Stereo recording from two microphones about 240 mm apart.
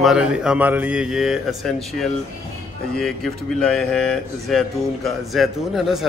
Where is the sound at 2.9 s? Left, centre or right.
Centre.